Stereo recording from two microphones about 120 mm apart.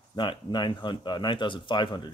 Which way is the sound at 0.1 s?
40° left (ahead or behind).